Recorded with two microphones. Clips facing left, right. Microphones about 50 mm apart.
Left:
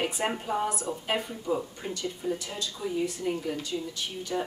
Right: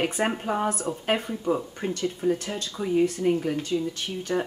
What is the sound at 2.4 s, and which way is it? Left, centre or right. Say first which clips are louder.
Speech: right 3 dB; right.